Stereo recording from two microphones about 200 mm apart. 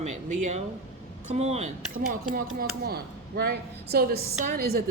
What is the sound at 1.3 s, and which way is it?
Speech, 35° right (ahead or behind).